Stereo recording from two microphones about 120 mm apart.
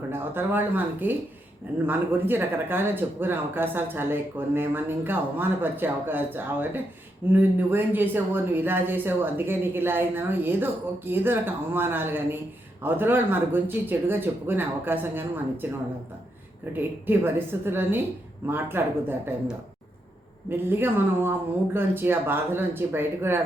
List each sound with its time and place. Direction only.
0.1 s speech: 15° right (ahead or behind)
16.7 s a woman's voice: 15° right (ahead or behind)
20.7 s speech: 20° right (ahead or behind)